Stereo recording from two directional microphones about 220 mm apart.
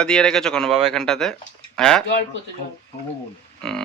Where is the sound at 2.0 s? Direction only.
50° left (ahead or behind).